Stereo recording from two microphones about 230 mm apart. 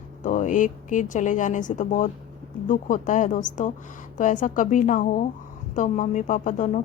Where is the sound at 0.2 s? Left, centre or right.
Left.